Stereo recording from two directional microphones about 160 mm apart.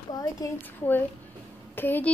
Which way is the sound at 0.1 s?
25° left (ahead or behind).